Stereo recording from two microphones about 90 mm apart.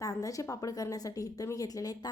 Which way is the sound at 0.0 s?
40° left (ahead or behind).